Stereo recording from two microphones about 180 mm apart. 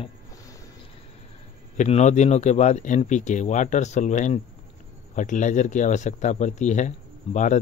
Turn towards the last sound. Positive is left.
turn(degrees=40)  # may be behind; listen again after turning